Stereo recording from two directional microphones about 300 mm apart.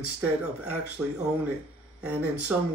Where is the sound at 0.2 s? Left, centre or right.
Centre.